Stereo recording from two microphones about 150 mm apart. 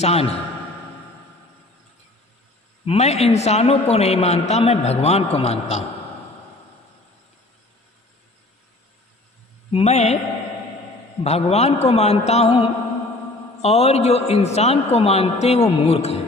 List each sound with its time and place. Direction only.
0.0 s a man's voice: 45° left (ahead or behind)
2.8 s a man's voice: 45° left (ahead or behind)
9.7 s a man's voice: 45° left (ahead or behind)
11.2 s a man's voice: 45° left (ahead or behind)